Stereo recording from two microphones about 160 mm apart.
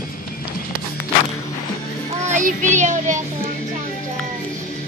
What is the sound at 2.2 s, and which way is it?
Child singing, 50° right (ahead or behind).